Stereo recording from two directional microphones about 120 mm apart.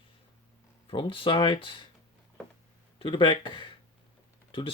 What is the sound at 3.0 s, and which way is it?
Speech, 40° left (ahead or behind).